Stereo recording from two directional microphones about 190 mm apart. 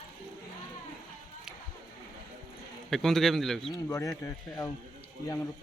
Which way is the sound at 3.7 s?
15° left (ahead or behind).